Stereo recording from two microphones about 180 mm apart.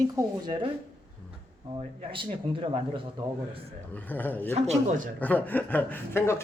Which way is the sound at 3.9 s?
10° left (ahead or behind).